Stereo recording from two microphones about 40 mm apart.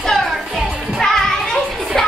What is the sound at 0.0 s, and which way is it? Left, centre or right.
Music, centre.